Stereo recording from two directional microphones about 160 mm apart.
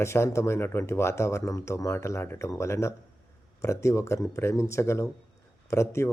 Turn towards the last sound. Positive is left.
turn(degrees=15)  # may be behind; listen again after turning